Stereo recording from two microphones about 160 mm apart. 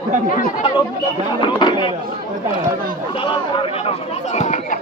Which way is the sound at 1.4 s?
30° left (ahead or behind).